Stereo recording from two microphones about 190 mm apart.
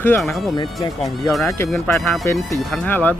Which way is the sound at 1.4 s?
15° left (ahead or behind).